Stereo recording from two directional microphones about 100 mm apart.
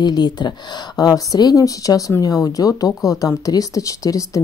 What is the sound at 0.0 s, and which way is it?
A woman's voice, 45° left (ahead or behind).